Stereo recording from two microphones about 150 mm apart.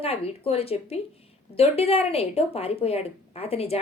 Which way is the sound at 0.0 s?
40° left (ahead or behind).